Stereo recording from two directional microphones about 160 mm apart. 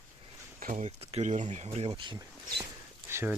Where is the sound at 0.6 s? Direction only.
50° right (ahead or behind); by 2.2 s 30° right (ahead or behind).